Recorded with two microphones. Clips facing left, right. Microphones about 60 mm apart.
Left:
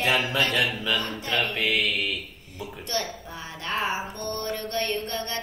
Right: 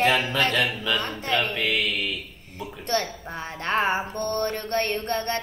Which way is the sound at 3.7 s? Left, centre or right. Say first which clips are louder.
Right 4 dB; right.